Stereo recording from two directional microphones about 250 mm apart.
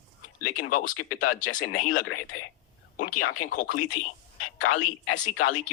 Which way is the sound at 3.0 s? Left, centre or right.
Left.